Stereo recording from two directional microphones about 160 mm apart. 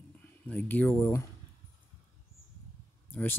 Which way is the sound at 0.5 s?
10° left (ahead or behind).